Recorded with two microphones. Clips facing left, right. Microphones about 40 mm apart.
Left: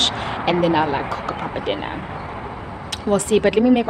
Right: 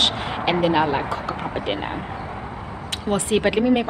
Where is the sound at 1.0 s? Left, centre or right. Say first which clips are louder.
Left 1 dB; centre.